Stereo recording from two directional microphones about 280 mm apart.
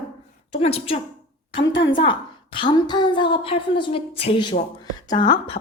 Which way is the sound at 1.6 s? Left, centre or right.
Left.